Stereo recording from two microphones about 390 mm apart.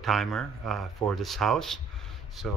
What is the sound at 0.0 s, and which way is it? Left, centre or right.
Speech, centre.